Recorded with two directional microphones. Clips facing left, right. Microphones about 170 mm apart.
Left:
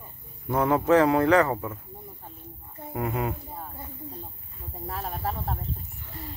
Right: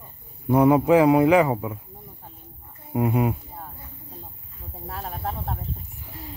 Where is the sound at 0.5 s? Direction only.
15° right (ahead or behind).